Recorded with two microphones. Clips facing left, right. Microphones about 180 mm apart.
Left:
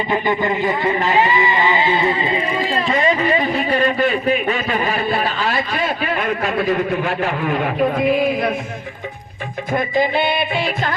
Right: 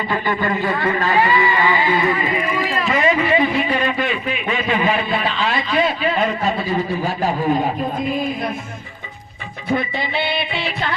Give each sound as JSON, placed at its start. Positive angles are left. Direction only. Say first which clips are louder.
{"t": 0.1, "sound": "a man's voice", "louder": "left 2 dB", "side_deg": 20}
{"t": 10.0, "sound": "music", "louder": "left 5 dB", "side_deg": 50}